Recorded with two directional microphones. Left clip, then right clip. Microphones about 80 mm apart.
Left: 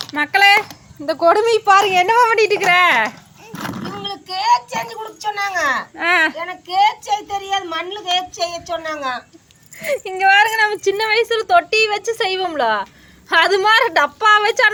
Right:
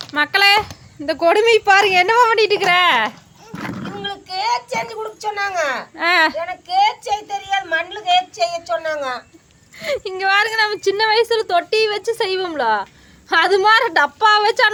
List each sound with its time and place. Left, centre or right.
0.2 s a woman's voice: centre
2.4 s a woman's voice: centre
4.0 s a sound: centre
6.0 s a woman's voice: centre
6.3 s a woman's voice: right
8.8 s a woman's voice: right
9.7 s a woman's voice: right
10.2 s a woman's voice: centre